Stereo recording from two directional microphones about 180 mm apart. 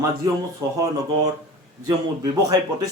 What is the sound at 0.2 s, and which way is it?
Speech, 20° right (ahead or behind).